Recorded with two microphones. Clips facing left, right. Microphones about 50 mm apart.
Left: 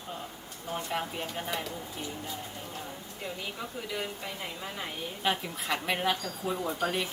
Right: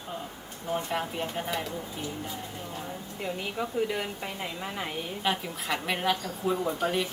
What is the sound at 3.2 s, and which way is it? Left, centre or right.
A woman's voice, right.